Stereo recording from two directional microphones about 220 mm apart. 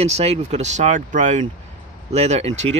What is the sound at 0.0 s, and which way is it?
Speech, 30° right (ahead or behind).